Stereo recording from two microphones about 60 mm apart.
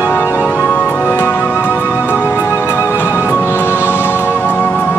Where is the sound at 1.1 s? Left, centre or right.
Left.